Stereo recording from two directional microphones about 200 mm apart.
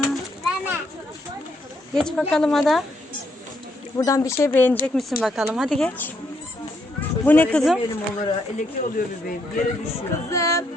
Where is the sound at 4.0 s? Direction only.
15° left (ahead or behind).